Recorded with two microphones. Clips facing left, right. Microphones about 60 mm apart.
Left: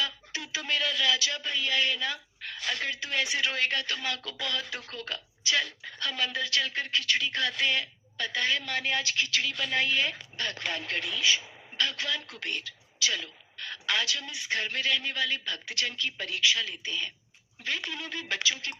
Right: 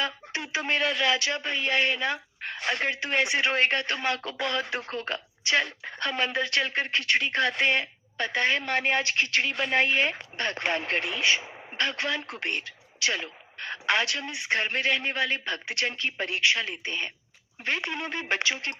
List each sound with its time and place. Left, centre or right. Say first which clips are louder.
0.0 s speech: right 3 dB; right